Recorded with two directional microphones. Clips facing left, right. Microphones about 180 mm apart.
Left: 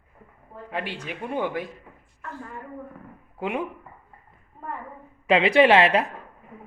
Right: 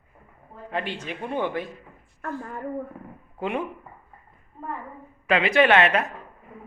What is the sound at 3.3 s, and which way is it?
Speech, 10° left (ahead or behind).